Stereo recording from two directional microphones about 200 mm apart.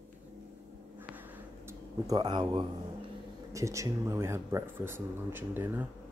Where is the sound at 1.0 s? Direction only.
10° right (ahead or behind).